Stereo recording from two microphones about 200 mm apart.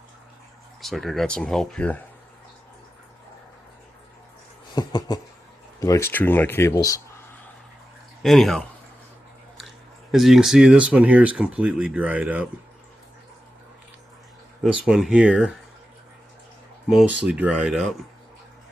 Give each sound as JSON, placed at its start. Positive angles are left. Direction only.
{"t": 0.8, "sound": "speech", "side_deg": 0}
{"t": 4.7, "sound": "a sound", "side_deg": 20}
{"t": 5.8, "sound": "speech", "side_deg": 15}
{"t": 8.2, "sound": "speech", "side_deg": 0}
{"t": 14.6, "sound": "speech", "side_deg": -5}
{"t": 16.9, "sound": "speech", "side_deg": 0}